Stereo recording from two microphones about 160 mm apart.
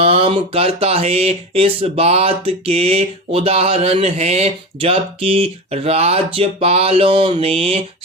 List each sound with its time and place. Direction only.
0.0 s speech: 35° right (ahead or behind)